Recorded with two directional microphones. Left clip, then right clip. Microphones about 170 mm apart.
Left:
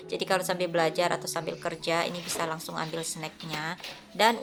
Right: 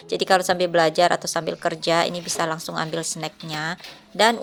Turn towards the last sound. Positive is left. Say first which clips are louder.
# right 5 dB
turn(degrees=-35)  # may be behind; listen again after turning